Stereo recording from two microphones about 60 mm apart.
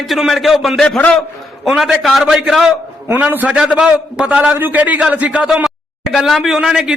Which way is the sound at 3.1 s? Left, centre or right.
Right.